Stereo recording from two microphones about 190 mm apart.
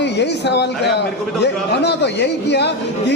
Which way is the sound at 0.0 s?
65° left (ahead or behind).